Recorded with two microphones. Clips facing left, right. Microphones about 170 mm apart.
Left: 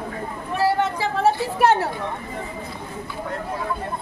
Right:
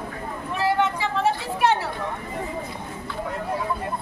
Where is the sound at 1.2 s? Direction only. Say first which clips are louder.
Left 4 dB; 45° left (ahead or behind).